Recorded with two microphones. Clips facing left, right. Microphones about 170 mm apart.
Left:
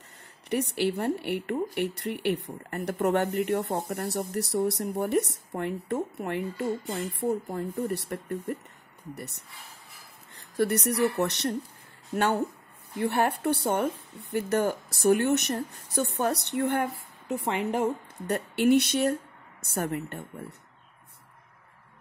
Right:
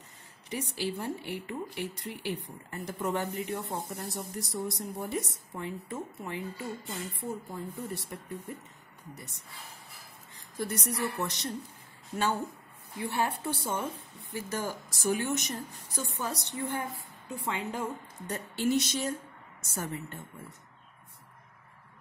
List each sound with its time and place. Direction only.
0.5 s speech: 65° left (ahead or behind)